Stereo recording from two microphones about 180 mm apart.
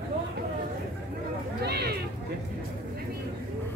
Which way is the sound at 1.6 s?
65° right (ahead or behind).